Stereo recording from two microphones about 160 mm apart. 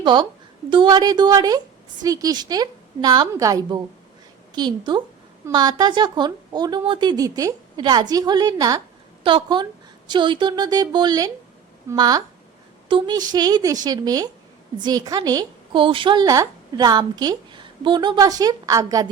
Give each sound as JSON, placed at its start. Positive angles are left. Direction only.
{"t": 0.0, "sound": "a woman's voice", "side_deg": -30}